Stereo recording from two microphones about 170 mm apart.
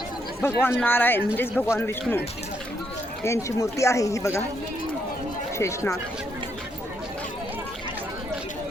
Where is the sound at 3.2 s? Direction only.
15° left (ahead or behind).